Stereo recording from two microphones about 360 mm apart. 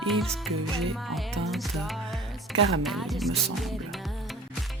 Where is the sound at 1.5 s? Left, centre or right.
Centre.